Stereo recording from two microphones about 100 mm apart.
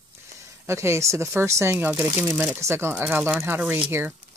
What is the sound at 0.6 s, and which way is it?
Speech, 30° right (ahead or behind).